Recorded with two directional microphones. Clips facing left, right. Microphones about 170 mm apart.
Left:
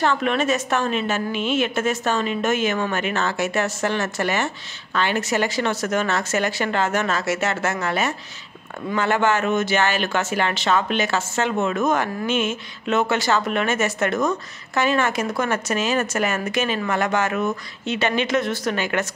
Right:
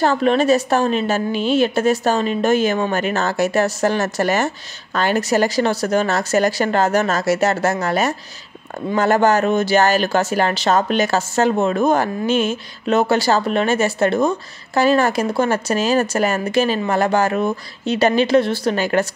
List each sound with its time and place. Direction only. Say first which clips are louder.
0.0 s speech: right 5 dB; 35° right (ahead or behind)